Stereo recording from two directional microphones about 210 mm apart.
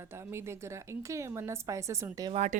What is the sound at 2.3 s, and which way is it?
Speech, 30° right (ahead or behind).